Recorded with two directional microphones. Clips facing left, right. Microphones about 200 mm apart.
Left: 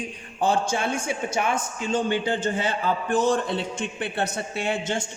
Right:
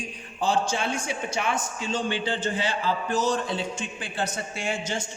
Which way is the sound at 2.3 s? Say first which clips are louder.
Left 2 dB; 50° left (ahead or behind).